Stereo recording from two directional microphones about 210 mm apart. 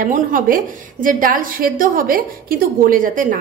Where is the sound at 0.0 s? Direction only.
40° right (ahead or behind).